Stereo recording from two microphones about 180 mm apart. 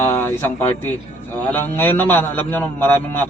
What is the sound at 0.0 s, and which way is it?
A man's voice, 15° left (ahead or behind).